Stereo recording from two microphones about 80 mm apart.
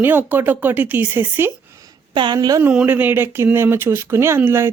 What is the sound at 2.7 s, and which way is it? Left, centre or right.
Speech, right.